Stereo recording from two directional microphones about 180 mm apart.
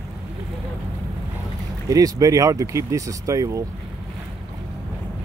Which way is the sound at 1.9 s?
20° right (ahead or behind).